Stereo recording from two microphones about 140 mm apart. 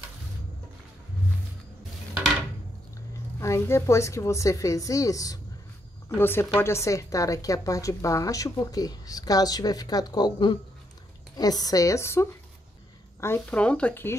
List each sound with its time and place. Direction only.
3.3 s speech: 20° left (ahead or behind)